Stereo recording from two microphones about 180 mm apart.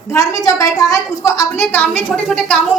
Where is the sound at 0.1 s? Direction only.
20° left (ahead or behind).